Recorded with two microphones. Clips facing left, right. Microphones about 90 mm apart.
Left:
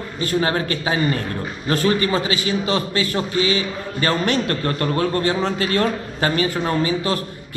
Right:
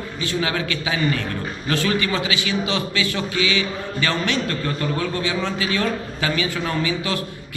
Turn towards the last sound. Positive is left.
turn(degrees=40)  # may be behind; listen again after turning